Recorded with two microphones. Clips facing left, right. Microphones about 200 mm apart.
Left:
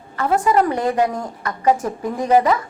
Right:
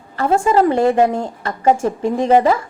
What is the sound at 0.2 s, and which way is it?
A woman's voice, 25° right (ahead or behind).